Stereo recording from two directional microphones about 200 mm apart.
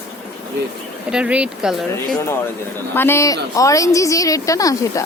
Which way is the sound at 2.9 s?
10° left (ahead or behind).